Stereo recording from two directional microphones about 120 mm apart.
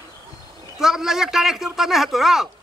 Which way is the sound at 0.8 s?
5° right (ahead or behind).